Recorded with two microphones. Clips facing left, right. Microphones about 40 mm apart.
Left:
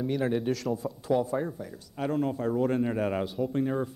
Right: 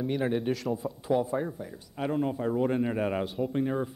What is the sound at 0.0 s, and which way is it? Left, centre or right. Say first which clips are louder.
A man's voice: left 1 dB; centre.